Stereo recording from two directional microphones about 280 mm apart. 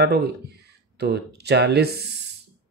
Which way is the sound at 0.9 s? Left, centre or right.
Right.